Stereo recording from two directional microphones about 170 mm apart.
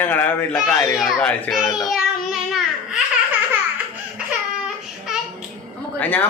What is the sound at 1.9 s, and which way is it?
Babbling, centre (ahead or behind).